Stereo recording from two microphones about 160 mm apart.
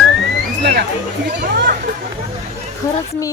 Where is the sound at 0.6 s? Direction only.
90° right.